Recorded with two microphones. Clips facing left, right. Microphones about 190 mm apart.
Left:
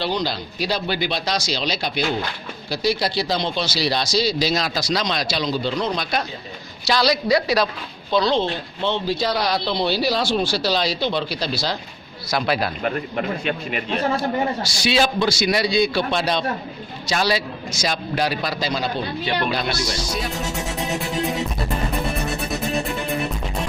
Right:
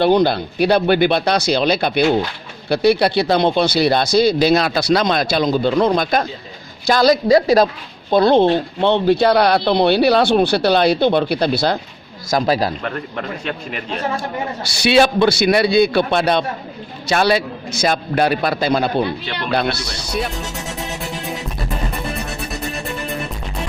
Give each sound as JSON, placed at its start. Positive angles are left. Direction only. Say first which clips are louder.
{"t": 0.0, "sound": "a woman's voice", "louder": "right 10 dB", "side_deg": -55}
{"t": 12.3, "sound": "speech", "louder": "right 5 dB", "side_deg": -40}
{"t": 13.7, "sound": "speech", "louder": "left 1 dB", "side_deg": 5}
{"t": 14.6, "sound": "speech", "louder": "right 6 dB", "side_deg": -60}
{"t": 22.4, "sound": "music", "louder": "left 2 dB", "side_deg": 0}